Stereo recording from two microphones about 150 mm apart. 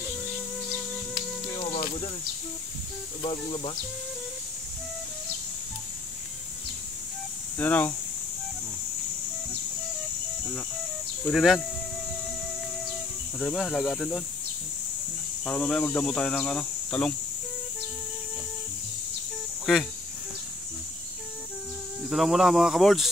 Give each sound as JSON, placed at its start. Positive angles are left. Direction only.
{"t": 3.2, "sound": "speech", "side_deg": 35}
{"t": 7.5, "sound": "speech", "side_deg": 10}
{"t": 11.3, "sound": "speech", "side_deg": 0}
{"t": 13.4, "sound": "speech", "side_deg": 0}
{"t": 15.4, "sound": "speech", "side_deg": 5}
{"t": 19.6, "sound": "speech", "side_deg": 0}
{"t": 22.1, "sound": "speech", "side_deg": 0}